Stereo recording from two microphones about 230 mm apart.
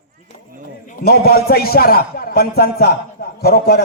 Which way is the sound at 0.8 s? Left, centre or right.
Left.